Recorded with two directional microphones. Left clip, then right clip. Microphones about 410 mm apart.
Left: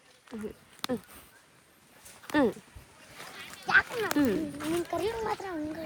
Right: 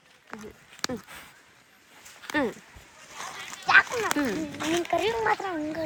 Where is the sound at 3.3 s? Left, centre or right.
Right.